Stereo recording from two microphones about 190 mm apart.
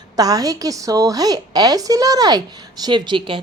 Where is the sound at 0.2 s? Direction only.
20° right (ahead or behind).